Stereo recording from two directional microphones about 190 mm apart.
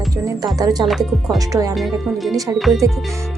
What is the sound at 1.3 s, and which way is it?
Speech, 15° right (ahead or behind).